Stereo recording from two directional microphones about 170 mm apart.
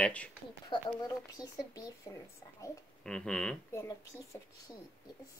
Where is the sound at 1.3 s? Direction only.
20° left (ahead or behind).